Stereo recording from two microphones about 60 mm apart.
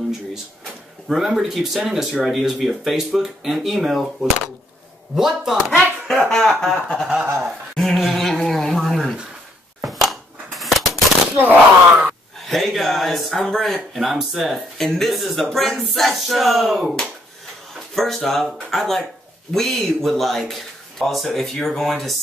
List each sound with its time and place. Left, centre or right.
1.0 s speech: centre
6.6 s a sound: centre
11.3 s speech: right
12.4 s speech: centre
14.0 s speech: centre
17.9 s speech: centre